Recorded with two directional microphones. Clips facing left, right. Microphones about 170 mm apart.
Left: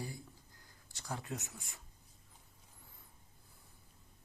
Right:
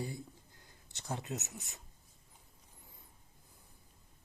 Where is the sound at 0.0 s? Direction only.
20° right (ahead or behind).